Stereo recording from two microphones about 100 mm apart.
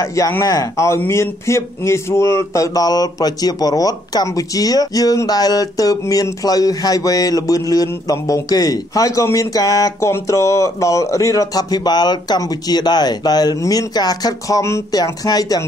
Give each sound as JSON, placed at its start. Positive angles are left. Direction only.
{"t": 0.0, "sound": "a man's voice", "side_deg": 35}